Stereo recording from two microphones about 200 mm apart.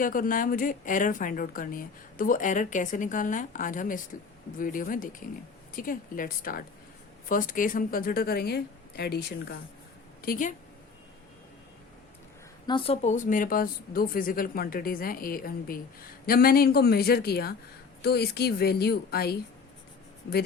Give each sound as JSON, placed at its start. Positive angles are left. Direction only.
{"t": 0.0, "sound": "a woman's voice", "side_deg": 45}
{"t": 12.6, "sound": "a woman's voice", "side_deg": 25}